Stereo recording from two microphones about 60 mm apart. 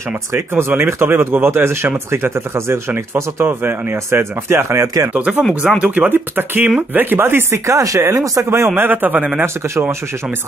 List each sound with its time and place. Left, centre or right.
0.3 s speech: right
5.1 s speech: right
7.6 s speech: right
8.5 s speech: right